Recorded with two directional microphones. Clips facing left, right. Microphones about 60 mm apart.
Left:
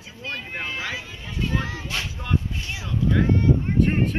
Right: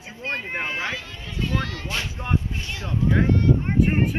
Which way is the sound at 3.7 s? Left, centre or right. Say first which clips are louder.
Even; centre.